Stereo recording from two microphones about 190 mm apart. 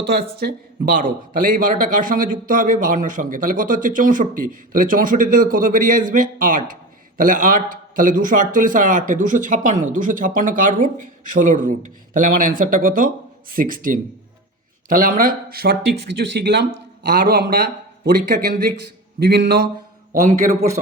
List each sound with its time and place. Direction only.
0.1 s speech: 55° right (ahead or behind)
20.2 s a man's voice: 40° right (ahead or behind)